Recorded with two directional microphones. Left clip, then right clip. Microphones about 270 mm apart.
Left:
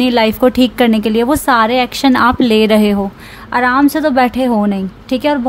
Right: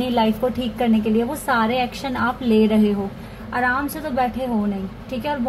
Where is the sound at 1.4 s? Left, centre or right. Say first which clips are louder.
Left 8 dB; left.